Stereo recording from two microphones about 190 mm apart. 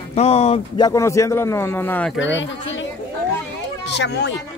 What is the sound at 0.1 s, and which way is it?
Speech, 35° left (ahead or behind).